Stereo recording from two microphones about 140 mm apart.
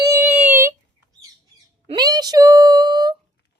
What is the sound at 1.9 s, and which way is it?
Speech, 30° right (ahead or behind).